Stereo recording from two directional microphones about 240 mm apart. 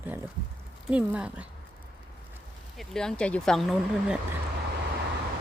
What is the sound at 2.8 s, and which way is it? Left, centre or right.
Speech, centre.